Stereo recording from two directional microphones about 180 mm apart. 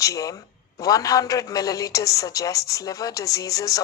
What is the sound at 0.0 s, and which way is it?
Speech, 20° left (ahead or behind).